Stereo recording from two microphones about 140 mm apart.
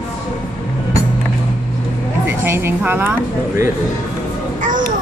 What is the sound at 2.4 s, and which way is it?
Speech, 15° right (ahead or behind).